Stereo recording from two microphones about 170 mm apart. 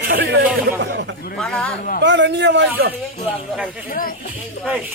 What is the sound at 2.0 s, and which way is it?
Speech, 90° right.